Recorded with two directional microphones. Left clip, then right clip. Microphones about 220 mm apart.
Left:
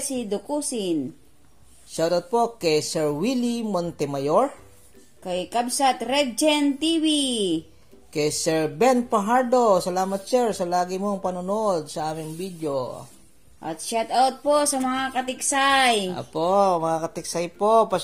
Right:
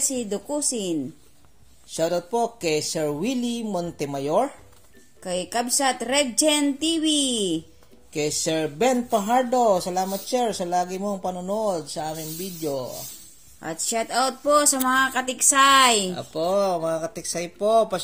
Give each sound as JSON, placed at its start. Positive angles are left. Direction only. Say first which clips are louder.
{"t": 0.0, "sound": "speech", "louder": "right 1 dB", "side_deg": -15}
{"t": 1.9, "sound": "speech", "louder": "left 2 dB", "side_deg": 20}
{"t": 5.2, "sound": "speech", "louder": "left 1 dB", "side_deg": -15}
{"t": 8.1, "sound": "speech", "louder": "left 2 dB", "side_deg": 20}
{"t": 13.6, "sound": "speech", "louder": "even", "side_deg": -15}
{"t": 16.1, "sound": "speech", "louder": "left 1 dB", "side_deg": 15}